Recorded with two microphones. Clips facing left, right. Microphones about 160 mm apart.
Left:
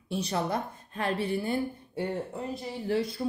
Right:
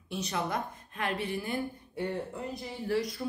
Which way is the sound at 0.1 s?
30° left (ahead or behind).